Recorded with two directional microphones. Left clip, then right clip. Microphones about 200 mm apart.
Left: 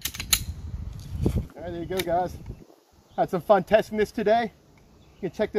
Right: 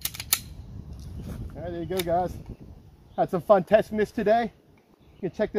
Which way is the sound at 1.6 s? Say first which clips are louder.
Even; 15° right (ahead or behind).